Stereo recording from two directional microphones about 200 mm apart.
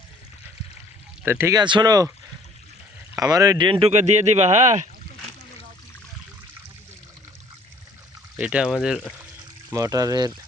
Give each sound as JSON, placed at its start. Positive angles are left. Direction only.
{"t": 1.2, "sound": "speech", "side_deg": -10}
{"t": 3.2, "sound": "speech", "side_deg": -20}
{"t": 8.4, "sound": "speech", "side_deg": -5}
{"t": 9.7, "sound": "speech", "side_deg": -15}